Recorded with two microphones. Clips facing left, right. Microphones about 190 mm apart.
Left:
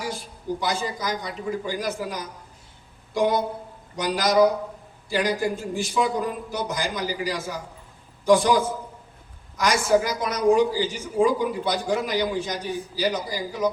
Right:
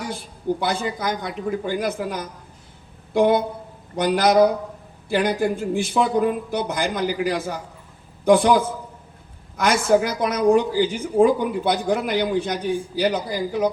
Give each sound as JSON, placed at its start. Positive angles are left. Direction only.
{"t": 0.6, "sound": "a man's voice", "side_deg": -55}